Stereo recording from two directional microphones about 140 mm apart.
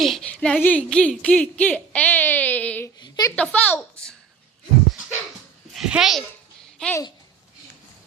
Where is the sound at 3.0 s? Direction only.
25° left (ahead or behind).